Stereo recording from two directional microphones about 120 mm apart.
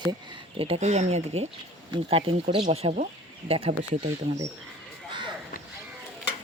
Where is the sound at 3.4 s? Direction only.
50° right (ahead or behind).